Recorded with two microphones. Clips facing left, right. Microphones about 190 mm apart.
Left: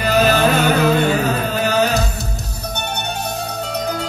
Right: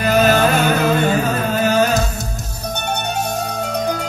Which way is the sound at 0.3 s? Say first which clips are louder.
Even; 50° right (ahead or behind).